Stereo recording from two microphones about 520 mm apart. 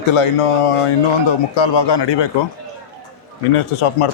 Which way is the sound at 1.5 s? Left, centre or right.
Left.